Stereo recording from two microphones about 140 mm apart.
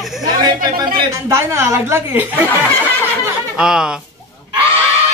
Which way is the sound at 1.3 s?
20° right (ahead or behind).